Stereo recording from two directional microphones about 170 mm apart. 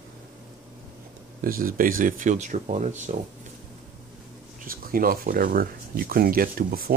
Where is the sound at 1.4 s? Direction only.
55° right (ahead or behind).